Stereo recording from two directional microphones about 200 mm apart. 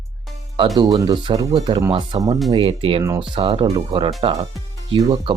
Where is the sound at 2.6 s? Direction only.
30° right (ahead or behind).